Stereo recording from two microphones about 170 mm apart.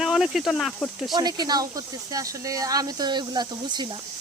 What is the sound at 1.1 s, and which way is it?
Speech, 25° right (ahead or behind).